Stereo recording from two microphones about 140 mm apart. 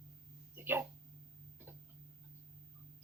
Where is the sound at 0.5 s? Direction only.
15° right (ahead or behind).